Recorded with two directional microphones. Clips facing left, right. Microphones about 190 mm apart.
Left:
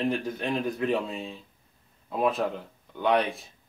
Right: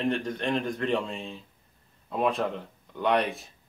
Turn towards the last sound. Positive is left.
turn(degrees=0)  # may be behind; listen again after turning